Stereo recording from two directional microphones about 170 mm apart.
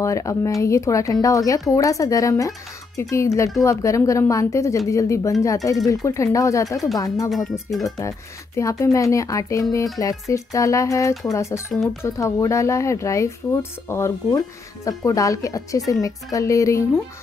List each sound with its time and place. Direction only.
0.0 s speech: 20° left (ahead or behind)
7.2 s speech: centre (ahead or behind)
8.5 s speech: 20° left (ahead or behind)
11.7 s speech: centre (ahead or behind)
12.0 s speech: 15° left (ahead or behind)